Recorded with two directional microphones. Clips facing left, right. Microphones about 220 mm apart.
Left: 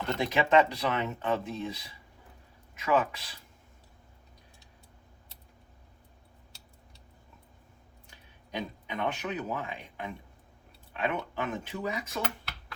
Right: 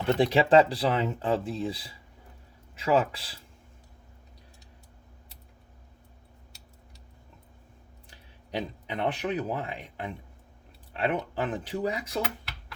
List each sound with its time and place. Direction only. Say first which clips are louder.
0.1 s speech: right 5 dB; 30° right (ahead or behind)
8.1 s speech: right 4 dB; 35° right (ahead or behind)
12.2 s a sound: right 2 dB; centre (ahead or behind)